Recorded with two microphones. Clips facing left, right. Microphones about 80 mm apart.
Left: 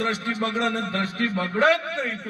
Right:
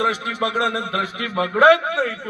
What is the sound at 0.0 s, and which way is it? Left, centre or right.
A man's voice, right.